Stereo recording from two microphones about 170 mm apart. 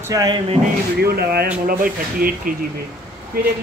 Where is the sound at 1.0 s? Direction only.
65° right (ahead or behind).